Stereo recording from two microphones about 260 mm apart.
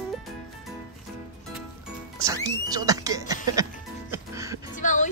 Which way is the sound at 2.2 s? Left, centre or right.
Centre.